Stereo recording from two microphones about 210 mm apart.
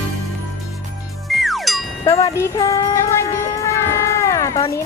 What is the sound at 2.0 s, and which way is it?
Music, 15° left (ahead or behind).